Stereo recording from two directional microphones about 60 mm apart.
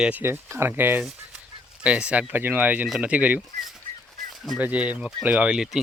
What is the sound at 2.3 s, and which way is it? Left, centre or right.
Speech, right.